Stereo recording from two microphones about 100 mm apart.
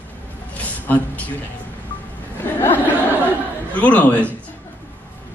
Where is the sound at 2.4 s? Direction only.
20° left (ahead or behind).